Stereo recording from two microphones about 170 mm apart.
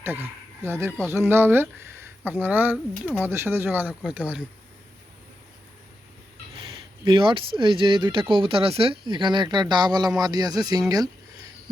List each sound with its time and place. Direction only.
0.0 s speech: 10° right (ahead or behind)
7.0 s speech: 30° right (ahead or behind)